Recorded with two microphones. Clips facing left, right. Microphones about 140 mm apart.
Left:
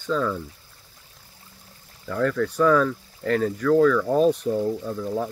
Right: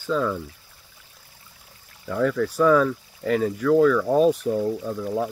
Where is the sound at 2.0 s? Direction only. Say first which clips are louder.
Right 1 dB; 5° right (ahead or behind).